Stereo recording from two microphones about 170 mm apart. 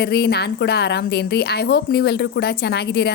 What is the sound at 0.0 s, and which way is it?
A woman's voice, 70° left (ahead or behind).